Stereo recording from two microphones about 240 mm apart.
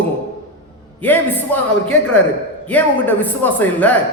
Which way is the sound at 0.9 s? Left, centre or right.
Centre.